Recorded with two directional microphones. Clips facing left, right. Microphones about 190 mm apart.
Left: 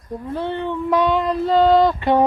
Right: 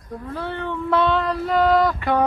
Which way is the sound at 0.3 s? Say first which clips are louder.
Left 4 dB; 20° left (ahead or behind).